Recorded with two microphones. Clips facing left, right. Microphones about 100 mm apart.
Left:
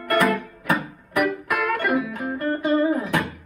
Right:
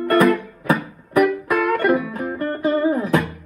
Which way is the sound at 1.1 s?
30° right (ahead or behind).